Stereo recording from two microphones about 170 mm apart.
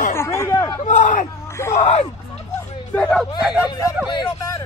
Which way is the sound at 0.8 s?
50° left (ahead or behind).